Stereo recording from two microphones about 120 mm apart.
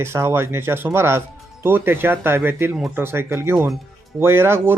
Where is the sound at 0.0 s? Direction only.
20° right (ahead or behind).